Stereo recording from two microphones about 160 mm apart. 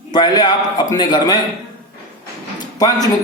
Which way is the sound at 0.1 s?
25° left (ahead or behind).